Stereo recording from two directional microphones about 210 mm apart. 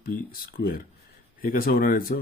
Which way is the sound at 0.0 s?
45° left (ahead or behind).